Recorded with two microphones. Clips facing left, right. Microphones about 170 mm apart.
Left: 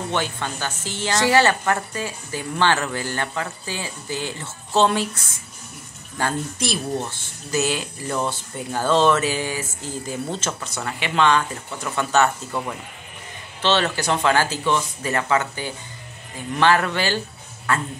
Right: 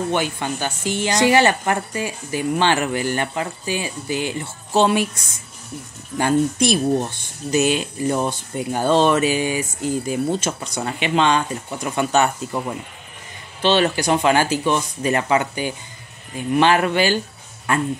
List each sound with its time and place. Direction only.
0.1 s a woman's voice: 15° right (ahead or behind)